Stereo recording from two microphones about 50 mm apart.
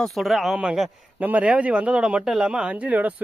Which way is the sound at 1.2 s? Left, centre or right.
Right.